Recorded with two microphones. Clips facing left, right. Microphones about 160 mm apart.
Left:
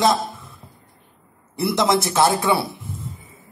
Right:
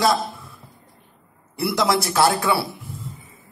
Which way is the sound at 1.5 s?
20° left (ahead or behind).